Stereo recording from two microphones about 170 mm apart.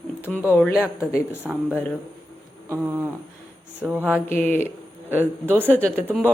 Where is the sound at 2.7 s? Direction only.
10° right (ahead or behind).